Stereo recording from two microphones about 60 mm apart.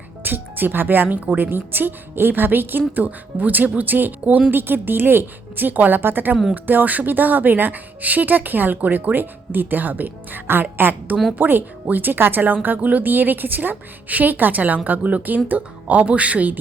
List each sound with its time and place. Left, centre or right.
0.2 s a woman's voice: right